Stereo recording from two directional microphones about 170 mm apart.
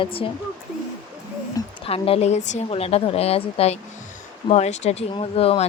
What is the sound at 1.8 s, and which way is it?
A woman's voice, 35° left (ahead or behind).